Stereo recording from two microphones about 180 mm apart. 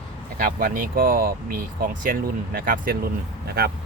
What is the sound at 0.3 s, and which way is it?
Speech, 50° right (ahead or behind).